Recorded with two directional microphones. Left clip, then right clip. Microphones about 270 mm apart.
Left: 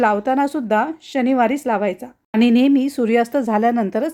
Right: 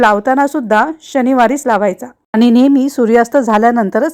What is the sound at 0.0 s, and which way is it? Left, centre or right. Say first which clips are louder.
Speech: right 7 dB; centre.